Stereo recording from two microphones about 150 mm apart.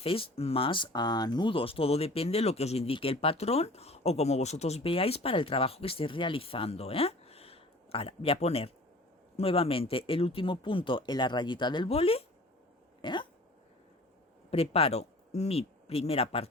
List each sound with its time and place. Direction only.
0.0 s speech: 40° left (ahead or behind)
13.0 s a sound: 30° left (ahead or behind)
14.5 s speech: 40° left (ahead or behind)